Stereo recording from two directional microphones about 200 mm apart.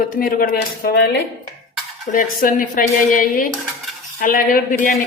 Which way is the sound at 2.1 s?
40° left (ahead or behind).